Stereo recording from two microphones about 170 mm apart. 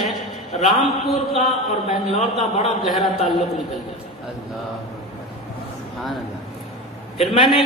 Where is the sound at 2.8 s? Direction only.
Centre (ahead or behind).